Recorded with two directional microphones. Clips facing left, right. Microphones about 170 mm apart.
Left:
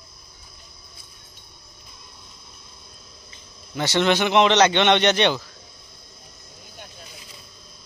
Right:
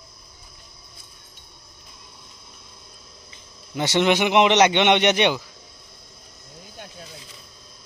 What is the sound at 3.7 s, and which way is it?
Speech, 20° right (ahead or behind).